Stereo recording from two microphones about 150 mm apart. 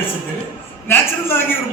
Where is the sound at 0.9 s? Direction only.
15° left (ahead or behind).